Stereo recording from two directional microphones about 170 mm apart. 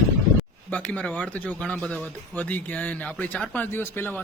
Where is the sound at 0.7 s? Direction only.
10° left (ahead or behind).